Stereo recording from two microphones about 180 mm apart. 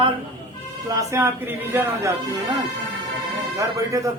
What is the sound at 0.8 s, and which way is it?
A man's voice, 20° right (ahead or behind).